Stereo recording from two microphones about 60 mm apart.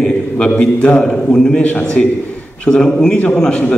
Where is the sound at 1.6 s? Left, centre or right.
Left.